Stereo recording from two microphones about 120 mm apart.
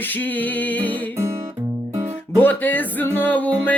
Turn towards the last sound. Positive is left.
turn(degrees=15)  # may be behind; listen again after turning